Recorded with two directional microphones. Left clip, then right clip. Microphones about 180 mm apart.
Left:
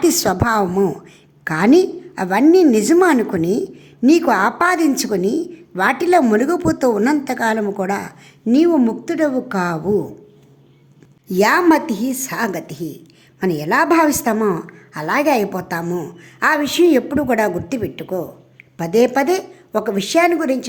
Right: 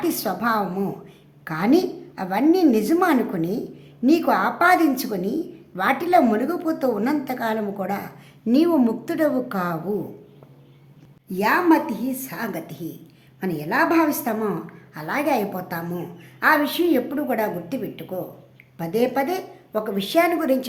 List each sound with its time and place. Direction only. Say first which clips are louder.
0.0 s a woman's voice: left 7 dB; 40° left (ahead or behind)
8.4 s a woman's voice: left 4 dB; 20° left (ahead or behind)
11.3 s a woman's voice: left 5 dB; 50° left (ahead or behind); by 20.7 s 25° left (ahead or behind)